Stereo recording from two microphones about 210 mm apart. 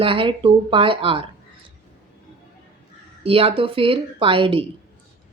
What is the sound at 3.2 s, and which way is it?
A woman's voice, 25° right (ahead or behind).